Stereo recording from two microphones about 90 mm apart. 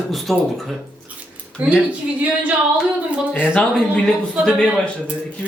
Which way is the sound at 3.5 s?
15° left (ahead or behind).